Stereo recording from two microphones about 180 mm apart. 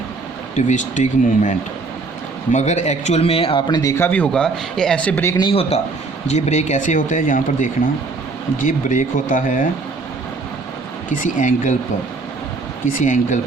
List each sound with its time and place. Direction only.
0.5 s a man's voice: 40° left (ahead or behind); by 5.3 s 10° left (ahead or behind)
5.4 s speech: 30° left (ahead or behind); by 9.6 s 45° left (ahead or behind)
11.1 s speech: 45° left (ahead or behind)
12.8 s speech: 45° left (ahead or behind)